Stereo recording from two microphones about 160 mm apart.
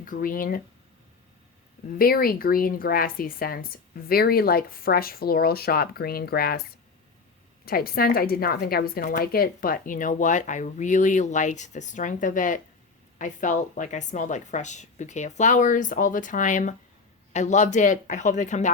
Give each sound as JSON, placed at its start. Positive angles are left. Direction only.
{"t": 0.0, "sound": "a woman's voice", "side_deg": 60}
{"t": 2.0, "sound": "a woman's voice", "side_deg": 70}
{"t": 7.6, "sound": "a woman's voice", "side_deg": 70}